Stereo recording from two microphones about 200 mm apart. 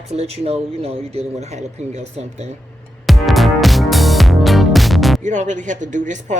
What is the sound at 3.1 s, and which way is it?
Music, centre (ahead or behind).